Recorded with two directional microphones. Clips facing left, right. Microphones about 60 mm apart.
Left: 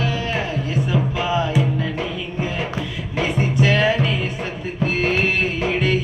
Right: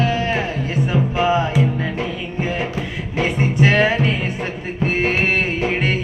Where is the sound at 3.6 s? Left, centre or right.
Right.